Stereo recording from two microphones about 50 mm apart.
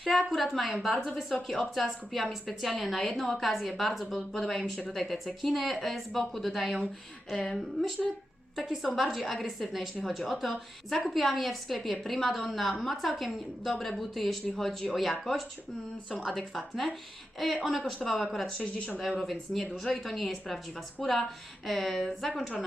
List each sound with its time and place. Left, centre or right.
0.0 s speech: centre
8.8 s speech: centre
16.6 s speech: centre
18.6 s speech: left
19.2 s speech: centre